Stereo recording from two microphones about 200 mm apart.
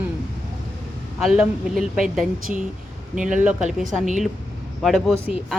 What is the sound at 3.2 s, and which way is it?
Speech, 40° right (ahead or behind).